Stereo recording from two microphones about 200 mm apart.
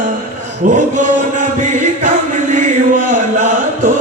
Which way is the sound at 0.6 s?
40° right (ahead or behind).